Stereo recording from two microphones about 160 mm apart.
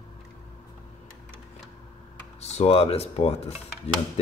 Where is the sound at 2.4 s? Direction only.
40° left (ahead or behind).